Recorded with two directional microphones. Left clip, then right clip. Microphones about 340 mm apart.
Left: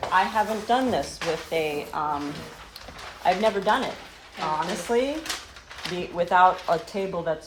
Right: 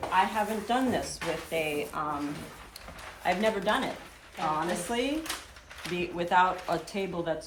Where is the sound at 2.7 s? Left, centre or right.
Centre.